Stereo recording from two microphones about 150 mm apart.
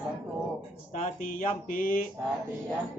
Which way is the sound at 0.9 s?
60° left (ahead or behind).